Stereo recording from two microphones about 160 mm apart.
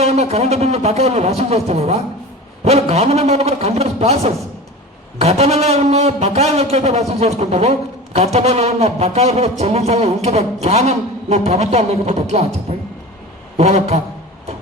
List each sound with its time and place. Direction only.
0.0 s speech: 40° right (ahead or behind)
13.6 s speech: 40° right (ahead or behind)